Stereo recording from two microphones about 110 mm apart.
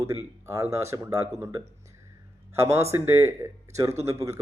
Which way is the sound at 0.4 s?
25° right (ahead or behind).